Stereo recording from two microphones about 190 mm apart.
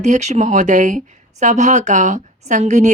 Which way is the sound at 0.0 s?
40° right (ahead or behind).